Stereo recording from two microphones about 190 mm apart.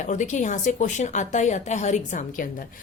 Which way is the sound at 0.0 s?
40° left (ahead or behind).